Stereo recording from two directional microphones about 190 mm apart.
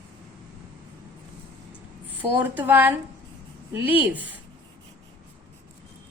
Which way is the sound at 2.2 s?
10° right (ahead or behind).